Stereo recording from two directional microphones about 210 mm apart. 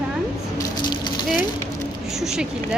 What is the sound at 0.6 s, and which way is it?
Spray, 20° left (ahead or behind).